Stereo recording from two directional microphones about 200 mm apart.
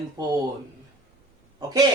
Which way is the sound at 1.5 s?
20° right (ahead or behind).